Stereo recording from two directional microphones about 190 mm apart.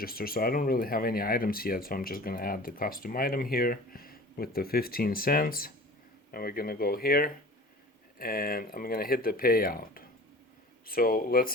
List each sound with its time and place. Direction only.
0.0 s speech: 50° left (ahead or behind)